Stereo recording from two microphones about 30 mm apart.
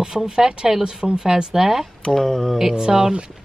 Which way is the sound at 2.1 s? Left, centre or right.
Centre.